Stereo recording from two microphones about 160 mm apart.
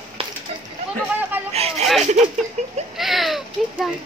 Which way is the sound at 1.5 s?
40° right (ahead or behind).